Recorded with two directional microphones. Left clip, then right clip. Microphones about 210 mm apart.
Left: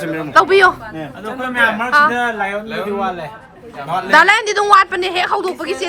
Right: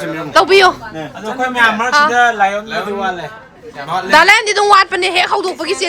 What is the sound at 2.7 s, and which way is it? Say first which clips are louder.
A man's voice: right 2 dB; 10° right (ahead or behind).